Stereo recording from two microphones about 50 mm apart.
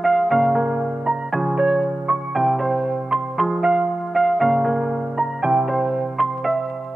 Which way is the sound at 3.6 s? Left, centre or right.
Centre.